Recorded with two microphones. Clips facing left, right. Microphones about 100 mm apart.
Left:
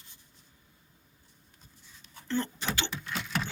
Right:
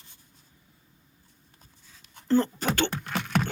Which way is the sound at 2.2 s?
40° right (ahead or behind).